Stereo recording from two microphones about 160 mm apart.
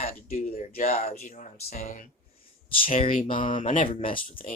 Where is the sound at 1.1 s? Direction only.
45° left (ahead or behind).